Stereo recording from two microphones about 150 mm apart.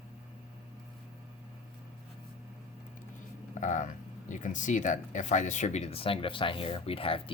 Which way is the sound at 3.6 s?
55° left (ahead or behind).